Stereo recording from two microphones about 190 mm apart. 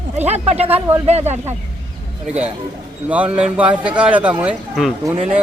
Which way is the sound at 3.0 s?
5° right (ahead or behind).